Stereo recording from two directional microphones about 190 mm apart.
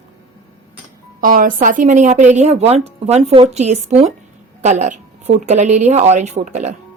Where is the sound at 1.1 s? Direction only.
45° right (ahead or behind).